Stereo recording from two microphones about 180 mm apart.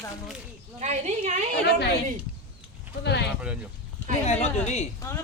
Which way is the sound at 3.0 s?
70° left (ahead or behind).